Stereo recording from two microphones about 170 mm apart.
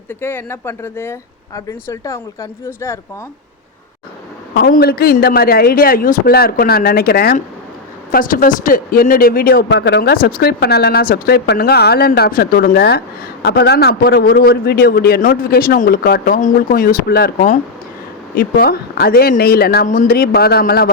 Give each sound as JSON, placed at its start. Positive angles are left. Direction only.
{"t": 0.1, "sound": "speech", "side_deg": 10}
{"t": 4.6, "sound": "a man's voice", "side_deg": 65}